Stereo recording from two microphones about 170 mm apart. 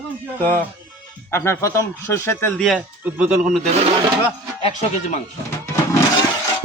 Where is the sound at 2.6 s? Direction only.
5° right (ahead or behind).